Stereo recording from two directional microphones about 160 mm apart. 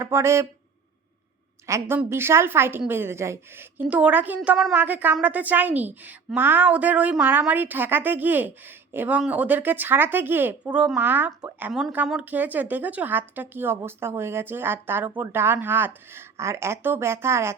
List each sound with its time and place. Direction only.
0.0 s speech: 15° right (ahead or behind)
1.6 s a woman's voice: 20° right (ahead or behind)